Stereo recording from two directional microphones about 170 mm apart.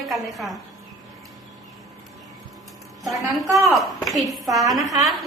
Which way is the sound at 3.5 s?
Centre (ahead or behind).